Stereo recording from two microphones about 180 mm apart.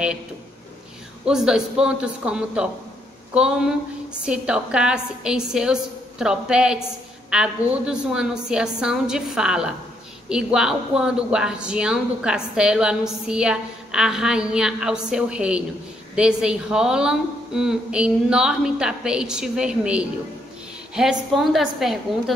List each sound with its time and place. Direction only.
1.2 s speech: 5° right (ahead or behind)